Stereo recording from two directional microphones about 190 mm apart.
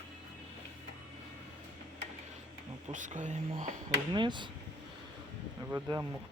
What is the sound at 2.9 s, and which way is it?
Speech, 40° right (ahead or behind).